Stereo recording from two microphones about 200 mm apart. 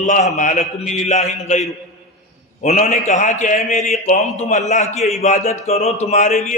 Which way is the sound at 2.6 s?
35° left (ahead or behind).